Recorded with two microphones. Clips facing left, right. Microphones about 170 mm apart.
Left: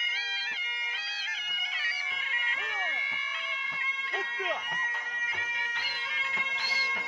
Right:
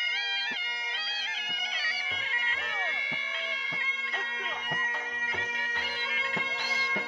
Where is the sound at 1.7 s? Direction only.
35° right (ahead or behind).